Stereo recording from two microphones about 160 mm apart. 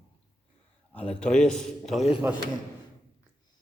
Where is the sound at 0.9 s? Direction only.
10° left (ahead or behind).